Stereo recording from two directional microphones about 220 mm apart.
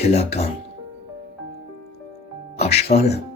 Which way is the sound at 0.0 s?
30° left (ahead or behind).